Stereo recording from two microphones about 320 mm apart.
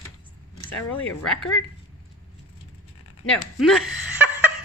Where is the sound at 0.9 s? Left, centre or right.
Left.